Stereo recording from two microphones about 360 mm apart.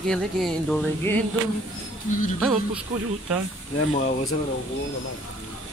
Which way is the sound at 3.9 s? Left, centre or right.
Centre.